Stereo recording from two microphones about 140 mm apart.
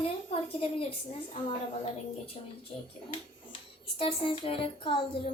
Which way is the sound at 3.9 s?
40° left (ahead or behind).